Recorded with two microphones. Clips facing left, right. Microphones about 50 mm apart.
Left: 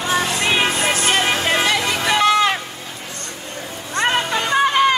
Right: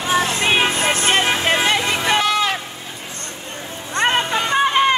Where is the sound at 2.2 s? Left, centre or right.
Centre.